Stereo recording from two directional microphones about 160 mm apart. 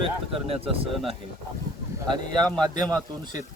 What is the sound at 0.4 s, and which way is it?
Speech, 40° right (ahead or behind).